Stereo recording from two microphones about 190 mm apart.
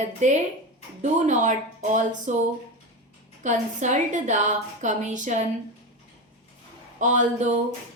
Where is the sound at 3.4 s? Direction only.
40° right (ahead or behind).